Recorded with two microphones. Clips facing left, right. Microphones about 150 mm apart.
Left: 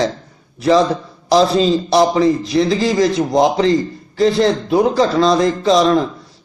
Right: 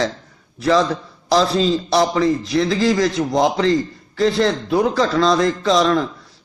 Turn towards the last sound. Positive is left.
turn(degrees=20)  # may be behind; listen again after turning